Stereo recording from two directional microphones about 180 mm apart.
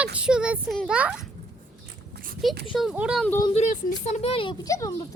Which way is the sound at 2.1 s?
55° right (ahead or behind).